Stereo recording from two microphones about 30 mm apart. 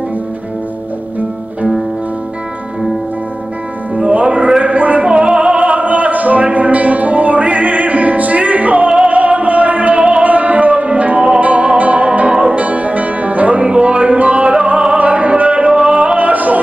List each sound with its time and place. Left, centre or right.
4.1 s music: right
4.6 s a sound: right
5.0 s music: right
5.6 s music: right
12.3 s music: right
12.5 s music: right
15.0 s music: right
15.7 s yodeling: right
16.2 s music: right